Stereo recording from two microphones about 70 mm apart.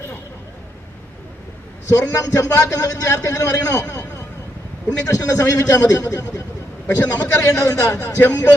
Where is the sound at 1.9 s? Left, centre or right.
Left.